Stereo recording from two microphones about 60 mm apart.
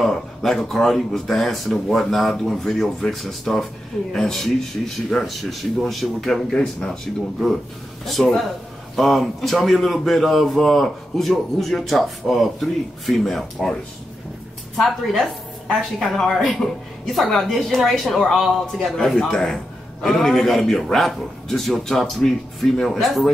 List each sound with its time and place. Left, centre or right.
0.0 s a woman's voice: centre
6.5 s speech: centre
6.9 s a woman's voice: centre
8.9 s a woman's voice: centre
14.8 s a woman's voice: centre